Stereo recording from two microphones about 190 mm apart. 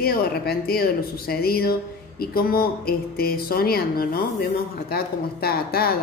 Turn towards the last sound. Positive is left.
turn(degrees=55)  # may be behind; listen again after turning